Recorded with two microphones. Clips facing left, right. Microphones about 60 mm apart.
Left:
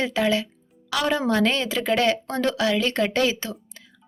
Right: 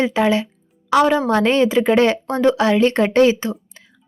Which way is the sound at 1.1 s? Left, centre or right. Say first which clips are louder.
Right 6 dB; centre.